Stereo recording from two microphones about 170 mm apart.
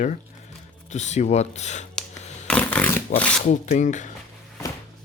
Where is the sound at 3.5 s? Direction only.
45° left (ahead or behind).